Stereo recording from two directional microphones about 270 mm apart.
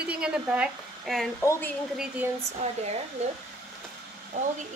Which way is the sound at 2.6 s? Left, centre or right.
Right.